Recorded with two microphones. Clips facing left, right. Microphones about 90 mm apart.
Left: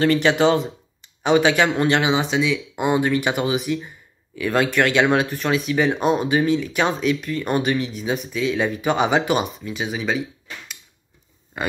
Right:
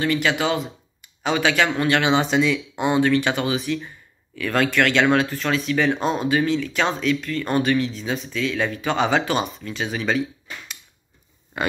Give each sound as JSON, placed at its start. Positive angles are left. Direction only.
{"t": 0.2, "sound": "speech", "side_deg": 30}
{"t": 2.0, "sound": "speech", "side_deg": 5}
{"t": 7.6, "sound": "speech", "side_deg": 30}
{"t": 7.9, "sound": "speech", "side_deg": 15}